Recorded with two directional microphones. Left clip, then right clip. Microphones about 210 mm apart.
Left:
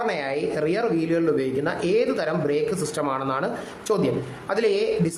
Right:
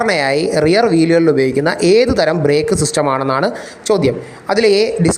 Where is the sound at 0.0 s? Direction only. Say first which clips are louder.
Right 11 dB; 40° right (ahead or behind).